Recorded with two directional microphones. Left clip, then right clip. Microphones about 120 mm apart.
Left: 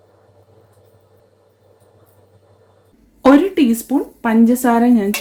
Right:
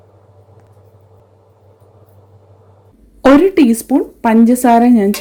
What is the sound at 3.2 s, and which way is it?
A woman's voice, 45° right (ahead or behind).